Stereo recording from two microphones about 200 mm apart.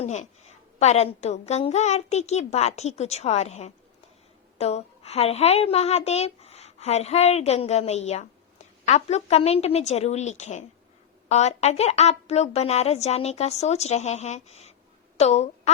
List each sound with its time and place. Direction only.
0.0 s a woman's voice: 35° left (ahead or behind)